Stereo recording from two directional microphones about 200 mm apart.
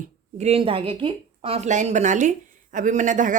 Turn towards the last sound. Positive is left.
turn(degrees=-40)  # may be behind; listen again after turning